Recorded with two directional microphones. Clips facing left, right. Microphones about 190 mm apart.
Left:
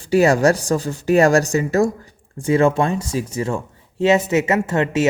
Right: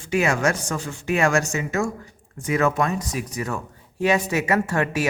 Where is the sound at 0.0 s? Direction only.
35° left (ahead or behind).